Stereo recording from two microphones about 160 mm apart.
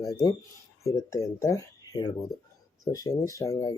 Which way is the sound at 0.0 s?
20° left (ahead or behind).